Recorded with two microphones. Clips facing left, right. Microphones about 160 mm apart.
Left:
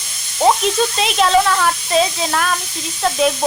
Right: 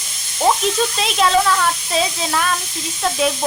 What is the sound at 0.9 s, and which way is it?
A woman's voice, centre (ahead or behind).